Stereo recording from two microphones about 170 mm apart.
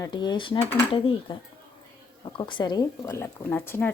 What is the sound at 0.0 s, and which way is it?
A woman's voice, 25° left (ahead or behind).